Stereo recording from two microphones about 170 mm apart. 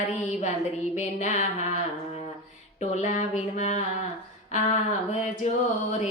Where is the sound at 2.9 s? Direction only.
45° left (ahead or behind).